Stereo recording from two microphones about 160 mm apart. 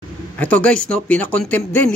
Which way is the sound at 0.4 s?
10° left (ahead or behind).